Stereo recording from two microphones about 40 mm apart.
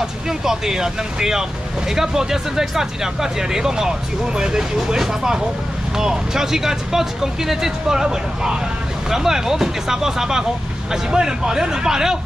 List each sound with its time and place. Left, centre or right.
0.5 s speech: centre